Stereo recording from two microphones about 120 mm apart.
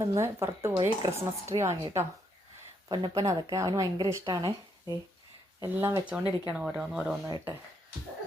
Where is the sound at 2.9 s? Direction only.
30° right (ahead or behind).